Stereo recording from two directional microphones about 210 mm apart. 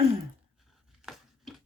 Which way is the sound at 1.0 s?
Centre (ahead or behind).